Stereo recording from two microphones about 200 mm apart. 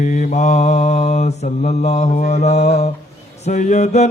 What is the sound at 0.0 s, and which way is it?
Mantra, 35° left (ahead or behind).